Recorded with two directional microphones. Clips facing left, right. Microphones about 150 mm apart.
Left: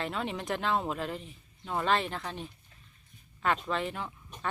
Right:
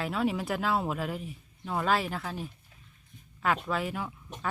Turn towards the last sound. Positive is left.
turn(degrees=-5)  # may be behind; listen again after turning